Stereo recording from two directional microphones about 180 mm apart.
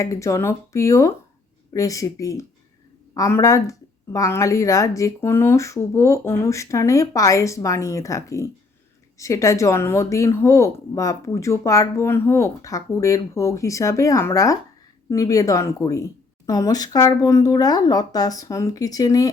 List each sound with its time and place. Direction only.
0.0 s speech: 15° left (ahead or behind)